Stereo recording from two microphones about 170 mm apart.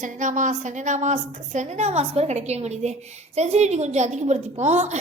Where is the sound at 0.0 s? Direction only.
45° right (ahead or behind).